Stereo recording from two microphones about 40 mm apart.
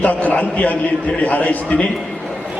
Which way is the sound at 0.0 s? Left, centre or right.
Left.